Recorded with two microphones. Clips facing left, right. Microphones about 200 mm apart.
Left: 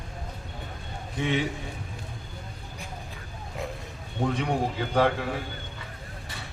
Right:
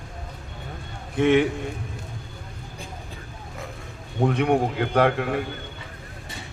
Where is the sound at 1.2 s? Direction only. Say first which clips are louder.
Right 9 dB; 60° right (ahead or behind).